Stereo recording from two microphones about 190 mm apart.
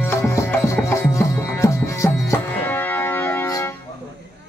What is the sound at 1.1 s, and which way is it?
Music, 15° left (ahead or behind).